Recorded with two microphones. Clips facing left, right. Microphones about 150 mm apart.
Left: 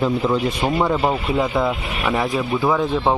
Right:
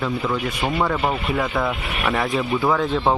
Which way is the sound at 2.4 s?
10° left (ahead or behind).